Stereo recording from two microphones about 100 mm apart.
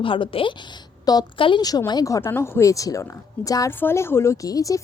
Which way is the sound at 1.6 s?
40° left (ahead or behind).